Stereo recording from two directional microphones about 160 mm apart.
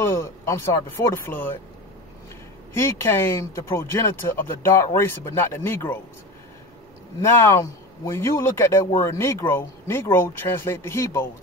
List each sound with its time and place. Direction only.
0.0 s speech: 15° left (ahead or behind)
2.7 s speech: 15° left (ahead or behind)
7.4 s speech: 15° left (ahead or behind)